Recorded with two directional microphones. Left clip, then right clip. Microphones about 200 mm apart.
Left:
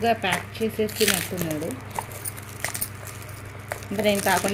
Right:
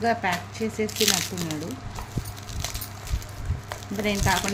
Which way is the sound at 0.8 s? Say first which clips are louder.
Even; 5° right (ahead or behind).